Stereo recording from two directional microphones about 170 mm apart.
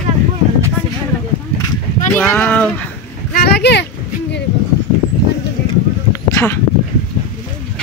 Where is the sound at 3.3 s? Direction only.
70° left (ahead or behind); by 3.9 s 90° left.